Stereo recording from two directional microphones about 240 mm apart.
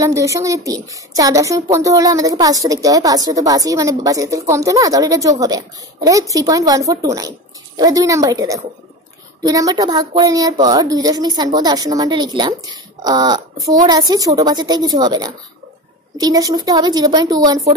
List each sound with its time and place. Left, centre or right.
0.0 s speech: centre